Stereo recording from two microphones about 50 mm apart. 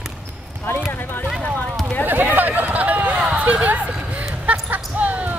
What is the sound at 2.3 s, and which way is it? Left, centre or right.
Run, right.